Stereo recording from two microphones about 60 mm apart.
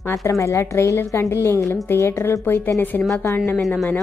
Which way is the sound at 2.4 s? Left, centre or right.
Left.